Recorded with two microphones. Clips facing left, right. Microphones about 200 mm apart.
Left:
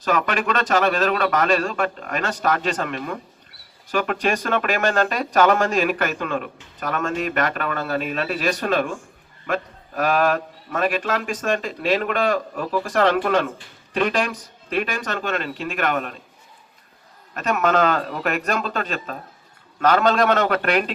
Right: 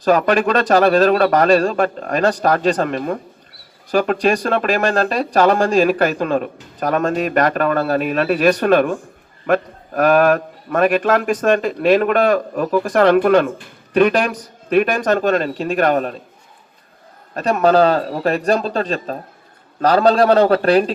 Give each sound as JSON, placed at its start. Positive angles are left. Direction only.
{"t": 0.0, "sound": "speech", "side_deg": -35}
{"t": 8.0, "sound": "a man's voice", "side_deg": -55}
{"t": 15.0, "sound": "speech", "side_deg": -40}
{"t": 17.3, "sound": "speech", "side_deg": -35}